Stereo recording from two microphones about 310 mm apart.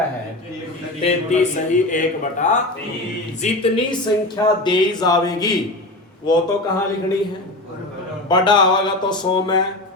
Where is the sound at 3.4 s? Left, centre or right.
Centre.